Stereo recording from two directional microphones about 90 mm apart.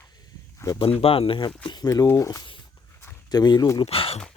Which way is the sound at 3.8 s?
90° left.